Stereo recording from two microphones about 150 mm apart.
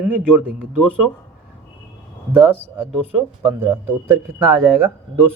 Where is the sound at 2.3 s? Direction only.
15° right (ahead or behind).